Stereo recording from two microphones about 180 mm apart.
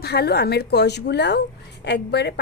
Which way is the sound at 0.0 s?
60° left (ahead or behind).